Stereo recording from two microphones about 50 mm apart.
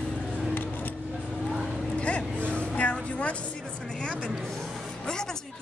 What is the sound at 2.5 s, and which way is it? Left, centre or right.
Music, left.